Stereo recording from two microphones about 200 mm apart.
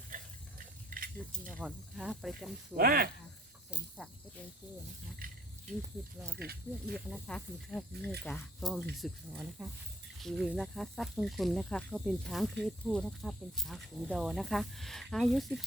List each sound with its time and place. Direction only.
0.9 s a sound: 45° right (ahead or behind)
1.6 s speech: 5° right (ahead or behind)
2.7 s speech: 50° right (ahead or behind)
3.7 s speech: centre (ahead or behind)
5.2 s speech: 45° right (ahead or behind)
6.4 s speech: 50° right (ahead or behind)
7.1 s speech: 5° left (ahead or behind)